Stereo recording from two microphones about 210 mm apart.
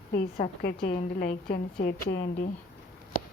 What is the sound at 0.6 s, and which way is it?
A woman's voice, 45° left (ahead or behind).